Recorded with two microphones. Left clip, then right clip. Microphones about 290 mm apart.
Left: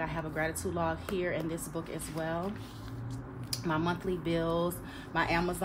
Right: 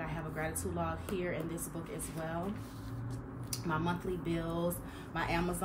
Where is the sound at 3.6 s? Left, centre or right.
Left.